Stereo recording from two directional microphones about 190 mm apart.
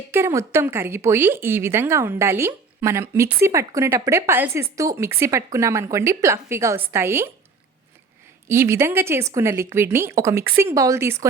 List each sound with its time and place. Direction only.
0.1 s a woman's voice: 15° right (ahead or behind)
8.4 s a woman's voice: 15° right (ahead or behind)